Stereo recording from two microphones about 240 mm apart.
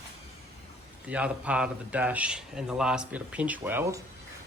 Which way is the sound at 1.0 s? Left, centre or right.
Centre.